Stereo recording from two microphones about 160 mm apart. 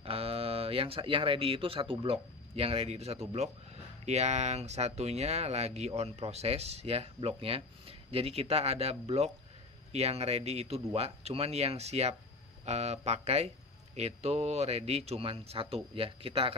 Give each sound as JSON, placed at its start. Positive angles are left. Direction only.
{"t": 0.0, "sound": "speech", "side_deg": -35}